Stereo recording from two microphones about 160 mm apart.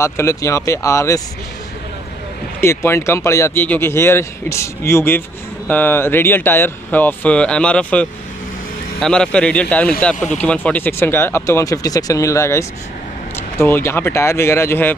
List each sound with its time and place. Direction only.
0.0 s speech: 20° left (ahead or behind)
2.6 s speech: 15° left (ahead or behind)